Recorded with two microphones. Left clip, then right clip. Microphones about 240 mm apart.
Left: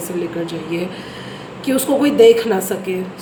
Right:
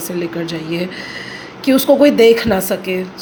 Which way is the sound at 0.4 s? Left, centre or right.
Right.